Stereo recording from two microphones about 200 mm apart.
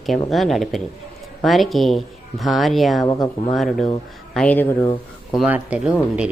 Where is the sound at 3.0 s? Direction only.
20° left (ahead or behind).